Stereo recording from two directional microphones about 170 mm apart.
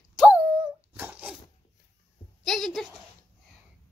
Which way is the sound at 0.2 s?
10° right (ahead or behind).